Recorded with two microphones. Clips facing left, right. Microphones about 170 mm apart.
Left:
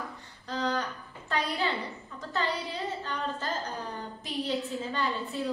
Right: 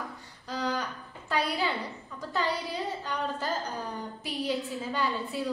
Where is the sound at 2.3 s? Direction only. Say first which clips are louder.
Right 1 dB; 10° right (ahead or behind).